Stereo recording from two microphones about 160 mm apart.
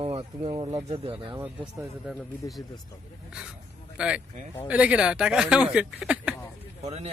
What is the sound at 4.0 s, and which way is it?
Speech, 5° right (ahead or behind).